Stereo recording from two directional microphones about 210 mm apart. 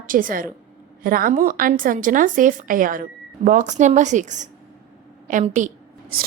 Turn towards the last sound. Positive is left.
turn(degrees=-40)  # may be behind; listen again after turning